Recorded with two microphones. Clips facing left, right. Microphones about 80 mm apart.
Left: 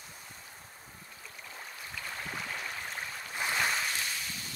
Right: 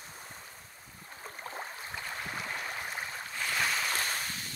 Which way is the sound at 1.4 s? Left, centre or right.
Right.